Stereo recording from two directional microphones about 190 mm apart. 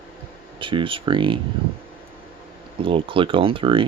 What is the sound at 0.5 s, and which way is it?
Speech, 25° right (ahead or behind).